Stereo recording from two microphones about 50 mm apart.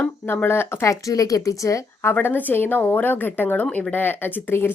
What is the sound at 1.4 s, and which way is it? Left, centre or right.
Speech, left.